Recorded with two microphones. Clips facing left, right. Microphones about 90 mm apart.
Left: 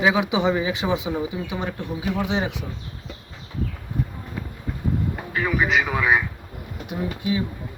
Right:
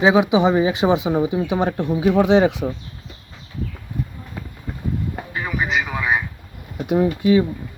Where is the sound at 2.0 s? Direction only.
50° right (ahead or behind).